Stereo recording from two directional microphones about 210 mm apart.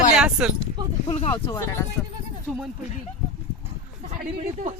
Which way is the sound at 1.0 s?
30° left (ahead or behind).